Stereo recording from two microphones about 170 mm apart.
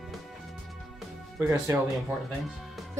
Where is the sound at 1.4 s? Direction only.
15° right (ahead or behind).